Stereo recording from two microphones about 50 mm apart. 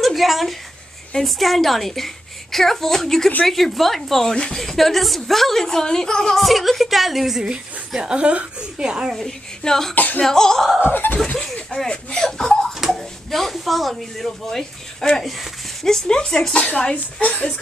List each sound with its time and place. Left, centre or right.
0.0 s a woman's voice: centre
6.4 s a woman's voice: centre
9.2 s speech: centre
9.9 s speech: left
10.2 s speech: centre
10.9 s speech: left
11.7 s speech: centre
12.7 s speech: centre
16.6 s speech: left